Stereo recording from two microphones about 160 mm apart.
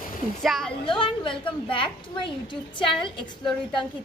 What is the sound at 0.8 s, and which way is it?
Speech, 30° left (ahead or behind).